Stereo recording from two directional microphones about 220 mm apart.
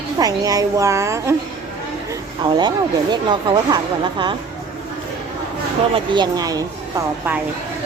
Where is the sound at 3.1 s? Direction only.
20° right (ahead or behind).